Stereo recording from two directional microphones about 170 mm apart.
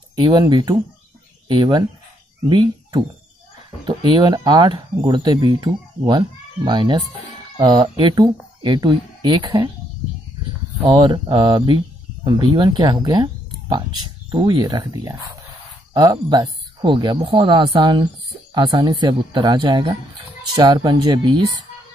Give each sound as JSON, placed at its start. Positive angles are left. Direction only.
{"t": 0.2, "sound": "speech", "side_deg": -25}
{"t": 10.8, "sound": "speech", "side_deg": -25}